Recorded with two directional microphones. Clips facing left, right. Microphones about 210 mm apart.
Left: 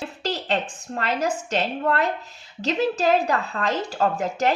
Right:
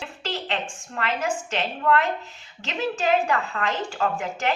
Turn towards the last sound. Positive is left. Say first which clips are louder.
# left 4 dB
turn(degrees=40)  # may be behind; listen again after turning